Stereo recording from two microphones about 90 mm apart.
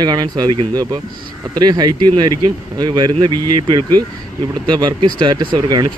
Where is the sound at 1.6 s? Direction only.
50° right (ahead or behind).